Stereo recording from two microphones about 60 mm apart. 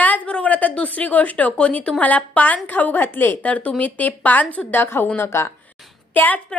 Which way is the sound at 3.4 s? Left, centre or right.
Left.